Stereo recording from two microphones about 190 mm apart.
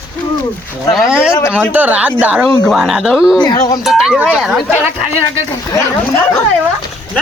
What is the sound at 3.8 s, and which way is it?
Speech, centre (ahead or behind).